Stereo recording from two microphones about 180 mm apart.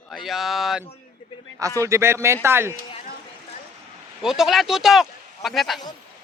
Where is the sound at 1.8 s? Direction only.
15° right (ahead or behind).